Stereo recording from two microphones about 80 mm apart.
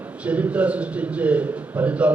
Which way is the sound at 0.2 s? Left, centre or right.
Centre.